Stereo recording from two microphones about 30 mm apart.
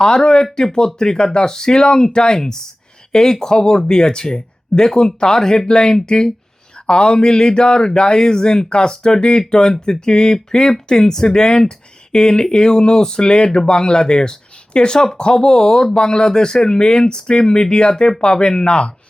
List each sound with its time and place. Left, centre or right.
0.5 s speech: left
11.3 s speech: left
14.9 s speech: left